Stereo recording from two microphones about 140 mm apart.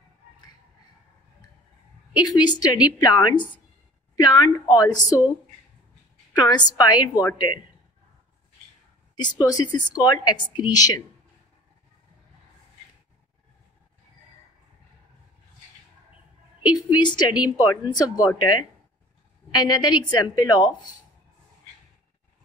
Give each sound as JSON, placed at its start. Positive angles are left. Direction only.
{"t": 2.1, "sound": "a woman's voice", "side_deg": 30}
{"t": 6.3, "sound": "a woman's voice", "side_deg": 30}
{"t": 9.1, "sound": "a woman's voice", "side_deg": 30}
{"t": 16.7, "sound": "a woman's voice", "side_deg": 30}